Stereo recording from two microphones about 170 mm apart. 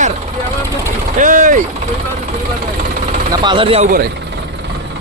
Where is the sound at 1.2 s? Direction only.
50° right (ahead or behind).